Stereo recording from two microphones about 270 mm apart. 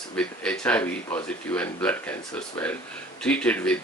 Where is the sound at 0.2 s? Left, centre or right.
Centre.